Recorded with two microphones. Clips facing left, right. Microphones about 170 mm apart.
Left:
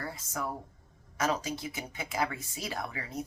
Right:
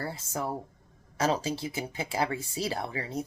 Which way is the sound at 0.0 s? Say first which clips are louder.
Right 3 dB; 30° right (ahead or behind).